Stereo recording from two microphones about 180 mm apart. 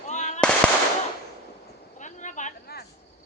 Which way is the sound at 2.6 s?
60° left (ahead or behind).